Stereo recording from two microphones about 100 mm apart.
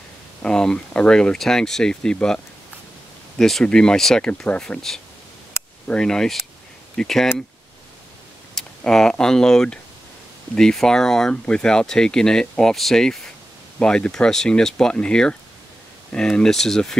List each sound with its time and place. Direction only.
0.4 s speech: 5° left (ahead or behind)
8.5 s speech: 5° left (ahead or behind)